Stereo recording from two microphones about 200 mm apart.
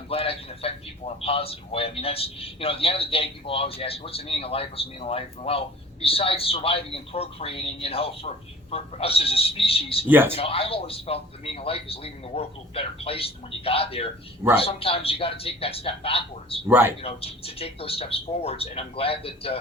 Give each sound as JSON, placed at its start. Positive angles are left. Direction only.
{"t": 0.1, "sound": "a man's voice", "side_deg": 30}
{"t": 10.1, "sound": "speech", "side_deg": -10}
{"t": 10.3, "sound": "a man's voice", "side_deg": 30}
{"t": 16.6, "sound": "speech", "side_deg": -10}
{"t": 17.0, "sound": "a man's voice", "side_deg": 30}